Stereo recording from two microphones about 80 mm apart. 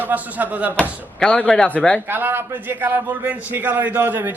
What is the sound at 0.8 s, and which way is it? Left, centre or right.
Speech, centre.